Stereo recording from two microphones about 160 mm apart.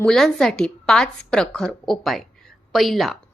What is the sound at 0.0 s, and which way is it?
A woman's voice, 5° left (ahead or behind).